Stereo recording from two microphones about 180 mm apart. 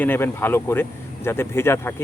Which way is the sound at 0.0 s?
10° left (ahead or behind).